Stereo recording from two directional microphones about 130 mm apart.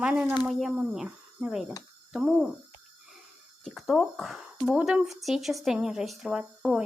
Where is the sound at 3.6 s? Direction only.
Centre (ahead or behind).